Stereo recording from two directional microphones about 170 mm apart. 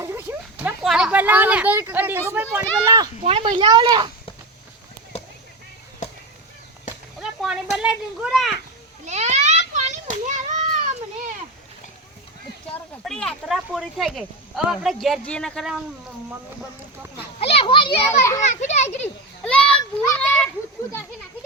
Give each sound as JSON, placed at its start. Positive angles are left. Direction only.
{"t": 0.0, "sound": "speech", "side_deg": -15}
{"t": 2.8, "sound": "speech", "side_deg": -20}
{"t": 3.2, "sound": "speech", "side_deg": -30}
{"t": 7.2, "sound": "speech", "side_deg": -5}
{"t": 9.0, "sound": "children playing", "side_deg": -40}
{"t": 12.7, "sound": "speech", "side_deg": 5}
{"t": 17.4, "sound": "children playing", "side_deg": 35}
{"t": 18.2, "sound": "a child's voice", "side_deg": 15}
{"t": 18.4, "sound": "children playing", "side_deg": 45}
{"t": 19.5, "sound": "a sound", "side_deg": 5}
{"t": 20.0, "sound": "children playing", "side_deg": 10}